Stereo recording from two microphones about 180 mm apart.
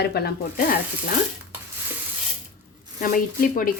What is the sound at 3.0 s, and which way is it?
Speech, 50° left (ahead or behind).